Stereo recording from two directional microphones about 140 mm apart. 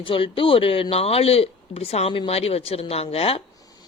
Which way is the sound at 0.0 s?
40° left (ahead or behind).